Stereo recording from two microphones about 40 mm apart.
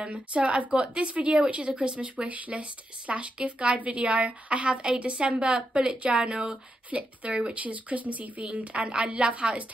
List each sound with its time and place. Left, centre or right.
0.1 s a woman's voice: right
7.6 s a woman's voice: right